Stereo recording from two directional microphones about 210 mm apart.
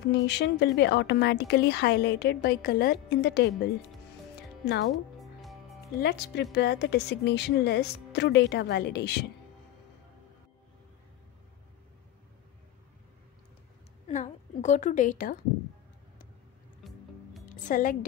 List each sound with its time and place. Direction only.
0.1 s a woman's voice: 55° left (ahead or behind)
5.2 s music: centre (ahead or behind)
5.9 s a woman's voice: 50° left (ahead or behind)
14.0 s a woman's voice: 35° left (ahead or behind)
16.8 s music: centre (ahead or behind)
17.6 s speech: 40° left (ahead or behind)